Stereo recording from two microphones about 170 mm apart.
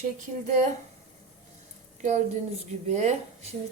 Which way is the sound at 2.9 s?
40° right (ahead or behind).